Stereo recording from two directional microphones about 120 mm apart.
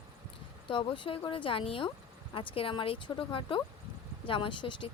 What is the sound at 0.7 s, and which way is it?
Speech, 45° left (ahead or behind).